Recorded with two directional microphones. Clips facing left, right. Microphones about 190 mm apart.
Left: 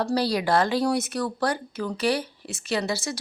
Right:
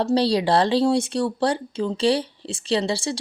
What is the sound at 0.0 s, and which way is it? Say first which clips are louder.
A woman's voice: right 4 dB; 25° right (ahead or behind).